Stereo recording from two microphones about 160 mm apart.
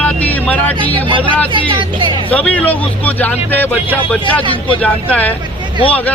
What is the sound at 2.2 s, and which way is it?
Speech, 10° left (ahead or behind).